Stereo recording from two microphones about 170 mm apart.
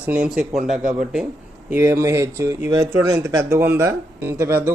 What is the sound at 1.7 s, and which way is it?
Speech, 15° right (ahead or behind).